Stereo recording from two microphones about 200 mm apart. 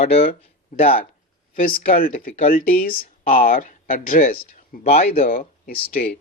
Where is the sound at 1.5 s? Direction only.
45° left (ahead or behind).